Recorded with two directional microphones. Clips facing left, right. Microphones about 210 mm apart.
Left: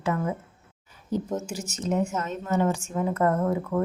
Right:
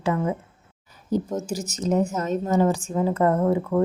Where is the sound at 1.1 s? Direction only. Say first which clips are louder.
Right 3 dB; 40° right (ahead or behind).